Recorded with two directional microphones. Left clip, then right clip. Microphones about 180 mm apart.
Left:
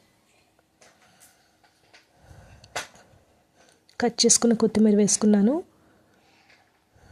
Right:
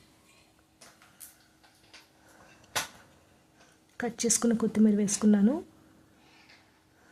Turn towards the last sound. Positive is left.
turn(degrees=25)  # may be behind; listen again after turning